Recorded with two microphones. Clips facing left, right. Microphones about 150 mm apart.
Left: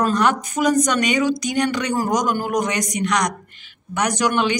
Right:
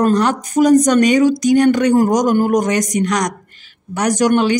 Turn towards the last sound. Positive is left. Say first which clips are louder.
# right 6 dB
turn(degrees=-45)  # may be behind; listen again after turning